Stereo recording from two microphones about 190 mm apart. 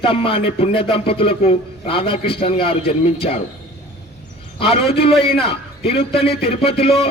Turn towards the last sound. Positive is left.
turn(degrees=30)  # may be behind; listen again after turning